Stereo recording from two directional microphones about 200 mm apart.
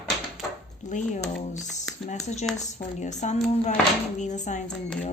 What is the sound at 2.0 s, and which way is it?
A woman's voice, 35° left (ahead or behind).